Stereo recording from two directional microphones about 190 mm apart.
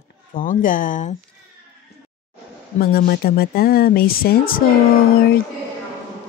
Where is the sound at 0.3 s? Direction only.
45° left (ahead or behind).